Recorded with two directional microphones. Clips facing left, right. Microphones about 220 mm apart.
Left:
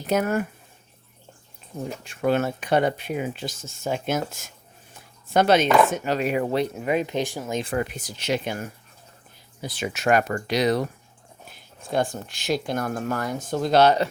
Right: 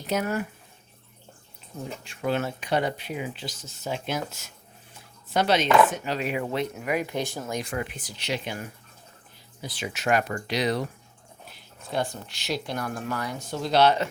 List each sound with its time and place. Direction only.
0.1 s speech: 50° left (ahead or behind)
2.0 s speech: 50° left (ahead or behind); by 7.6 s 15° left (ahead or behind)
7.6 s speech: 40° left (ahead or behind)